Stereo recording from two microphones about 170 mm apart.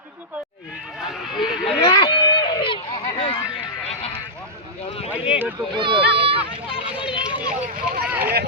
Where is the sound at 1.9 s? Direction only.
25° left (ahead or behind).